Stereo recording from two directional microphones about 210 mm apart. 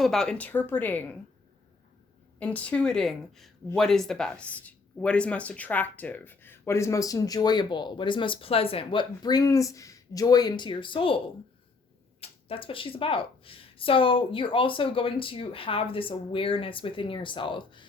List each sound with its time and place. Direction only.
0.0 s speech: centre (ahead or behind)
2.4 s speech: 5° left (ahead or behind); by 11.2 s 25° left (ahead or behind)
12.2 s speech: 25° left (ahead or behind)